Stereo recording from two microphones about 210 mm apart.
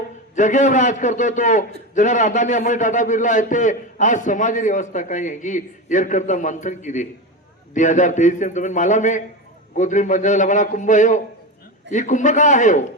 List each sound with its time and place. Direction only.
0.3 s a man's voice: 35° left (ahead or behind)